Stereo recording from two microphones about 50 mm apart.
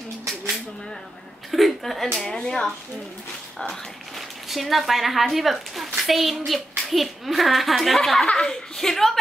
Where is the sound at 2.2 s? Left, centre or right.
Centre.